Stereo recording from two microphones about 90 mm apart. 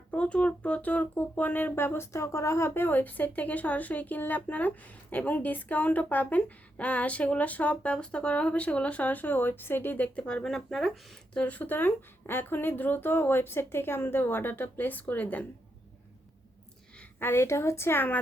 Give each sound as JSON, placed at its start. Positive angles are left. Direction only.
{"t": 0.1, "sound": "speech", "side_deg": 15}
{"t": 11.4, "sound": "a woman's voice", "side_deg": 20}
{"t": 17.2, "sound": "a woman's voice", "side_deg": 25}